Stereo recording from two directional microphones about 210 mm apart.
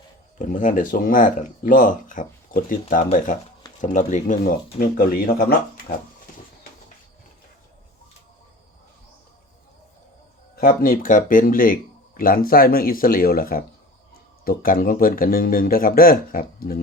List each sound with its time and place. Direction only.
0.3 s speech: 40° left (ahead or behind)
10.5 s speech: 45° left (ahead or behind)